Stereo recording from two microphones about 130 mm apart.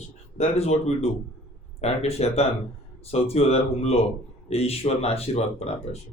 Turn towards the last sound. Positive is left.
turn(degrees=55)  # may be behind; listen again after turning